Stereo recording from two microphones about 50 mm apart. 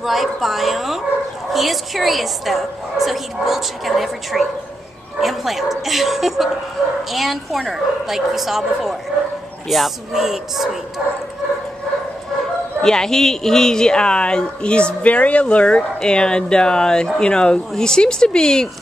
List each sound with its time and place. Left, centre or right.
0.0 s a woman's voice: centre
12.8 s speech: centre